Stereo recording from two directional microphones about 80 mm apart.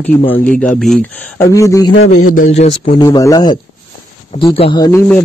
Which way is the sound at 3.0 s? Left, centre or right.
Left.